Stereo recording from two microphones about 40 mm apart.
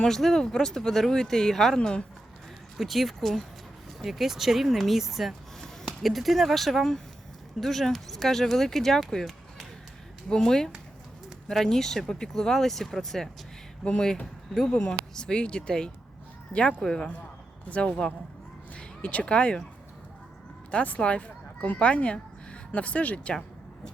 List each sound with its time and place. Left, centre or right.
0.0 s speech: centre
2.7 s speech: centre
5.5 s a sound: centre
6.0 s speech: centre
14.5 s speech: centre
14.8 s speech: left
17.7 s speech: left
20.7 s speech: left